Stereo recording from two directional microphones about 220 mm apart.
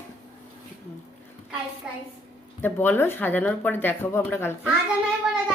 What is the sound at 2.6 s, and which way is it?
Speech, 10° left (ahead or behind).